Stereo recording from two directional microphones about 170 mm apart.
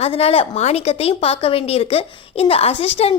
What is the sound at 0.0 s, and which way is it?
A woman's voice, 35° left (ahead or behind).